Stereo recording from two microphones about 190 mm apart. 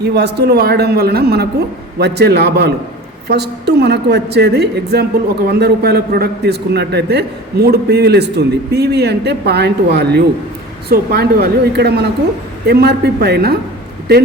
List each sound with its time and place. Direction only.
0.0 s a man's voice: 60° right (ahead or behind)